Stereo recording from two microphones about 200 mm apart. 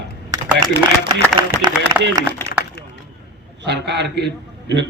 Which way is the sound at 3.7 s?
60° right (ahead or behind).